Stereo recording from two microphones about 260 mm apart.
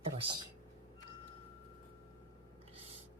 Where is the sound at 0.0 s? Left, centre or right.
Right.